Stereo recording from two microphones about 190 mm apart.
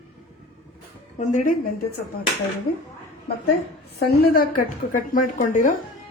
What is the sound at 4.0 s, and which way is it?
A woman's voice, 55° left (ahead or behind).